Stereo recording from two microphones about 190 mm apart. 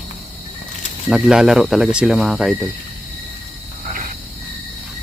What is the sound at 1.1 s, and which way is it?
Speech, 5° right (ahead or behind).